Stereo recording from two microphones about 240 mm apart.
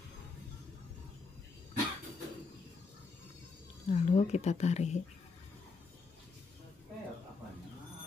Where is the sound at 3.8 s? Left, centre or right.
Left.